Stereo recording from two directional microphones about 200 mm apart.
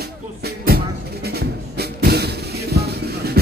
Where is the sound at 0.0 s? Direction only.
50° right (ahead or behind).